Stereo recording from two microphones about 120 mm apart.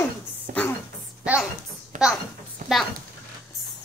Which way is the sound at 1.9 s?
90° right.